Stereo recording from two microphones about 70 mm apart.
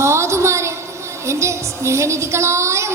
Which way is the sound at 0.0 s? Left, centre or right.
Right.